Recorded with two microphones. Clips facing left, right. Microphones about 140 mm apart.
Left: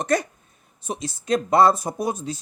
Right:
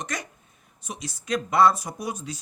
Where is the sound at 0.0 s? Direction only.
35° left (ahead or behind).